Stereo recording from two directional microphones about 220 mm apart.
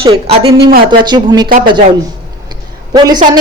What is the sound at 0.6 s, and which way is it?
Speech, 40° right (ahead or behind).